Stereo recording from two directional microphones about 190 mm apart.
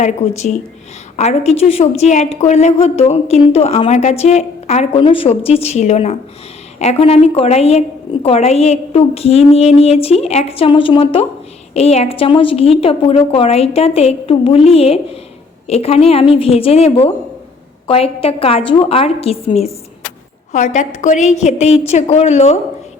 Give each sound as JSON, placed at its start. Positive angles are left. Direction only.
{"t": 0.0, "sound": "a woman's voice", "side_deg": 35}